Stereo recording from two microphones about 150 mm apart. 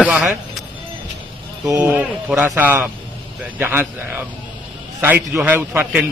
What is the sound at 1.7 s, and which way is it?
Speech, 20° right (ahead or behind).